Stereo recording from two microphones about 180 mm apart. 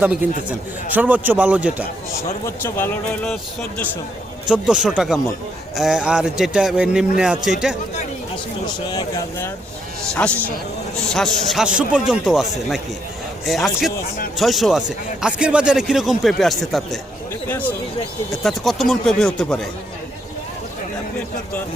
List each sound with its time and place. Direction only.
0.0 s a man's voice: 10° right (ahead or behind)
2.6 s speech: 10° left (ahead or behind)
4.4 s speech: 5° right (ahead or behind)
8.6 s speech: 25° left (ahead or behind)
10.2 s speech: 5° left (ahead or behind)